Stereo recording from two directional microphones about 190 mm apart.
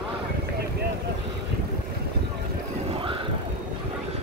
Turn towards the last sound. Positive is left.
turn(degrees=-30)  # may be behind; listen again after turning